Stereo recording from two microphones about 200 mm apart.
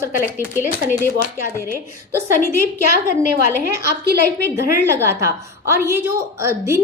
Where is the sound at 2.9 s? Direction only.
40° left (ahead or behind).